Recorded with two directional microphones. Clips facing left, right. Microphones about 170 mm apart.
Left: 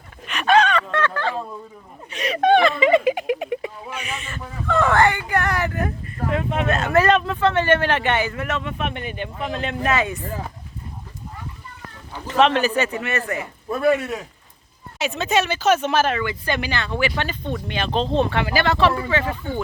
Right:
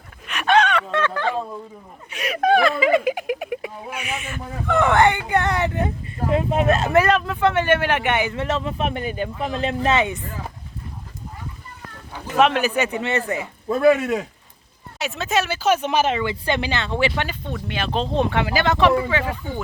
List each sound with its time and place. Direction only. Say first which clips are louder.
0.3 s a sound: left 1 dB; centre (ahead or behind)
0.9 s a sound: right 1 dB; 10° right (ahead or behind); by 6.9 s 35° right (ahead or behind)
7.3 s speech: even; 10° right (ahead or behind)
8.4 s speech: right 2 dB; 30° right (ahead or behind)
12.3 s speech: even; 10° right (ahead or behind)
13.0 s speech: right 2 dB; 25° right (ahead or behind)
14.9 s speech: left 2 dB; centre (ahead or behind); by 17.1 s 25° right (ahead or behind)
17.7 s speech: left 1 dB; 5° right (ahead or behind)